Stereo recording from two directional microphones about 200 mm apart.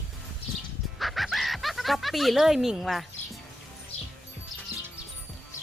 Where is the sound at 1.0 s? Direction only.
Centre (ahead or behind).